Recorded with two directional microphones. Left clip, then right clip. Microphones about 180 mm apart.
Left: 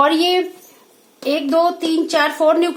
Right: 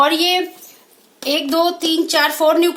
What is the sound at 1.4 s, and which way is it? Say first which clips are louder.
A woman's voice: left 2 dB; 50° left (ahead or behind).